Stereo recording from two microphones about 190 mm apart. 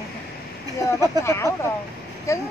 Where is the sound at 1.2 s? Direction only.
15° left (ahead or behind).